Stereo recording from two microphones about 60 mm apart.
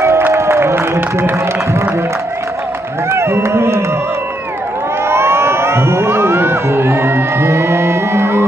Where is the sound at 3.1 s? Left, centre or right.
Right.